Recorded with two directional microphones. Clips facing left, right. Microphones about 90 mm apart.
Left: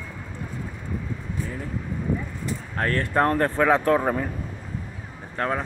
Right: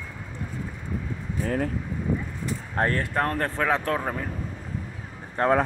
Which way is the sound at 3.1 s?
10° left (ahead or behind).